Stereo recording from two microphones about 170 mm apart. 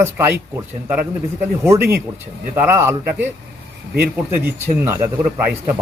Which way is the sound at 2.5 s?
15° right (ahead or behind).